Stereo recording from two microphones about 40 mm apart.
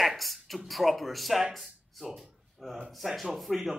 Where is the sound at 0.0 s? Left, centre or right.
Centre.